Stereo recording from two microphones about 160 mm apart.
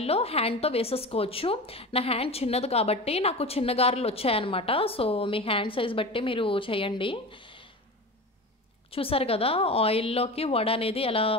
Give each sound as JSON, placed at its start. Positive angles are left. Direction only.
{"t": 0.0, "sound": "a woman's voice", "side_deg": 40}
{"t": 8.9, "sound": "a woman's voice", "side_deg": 35}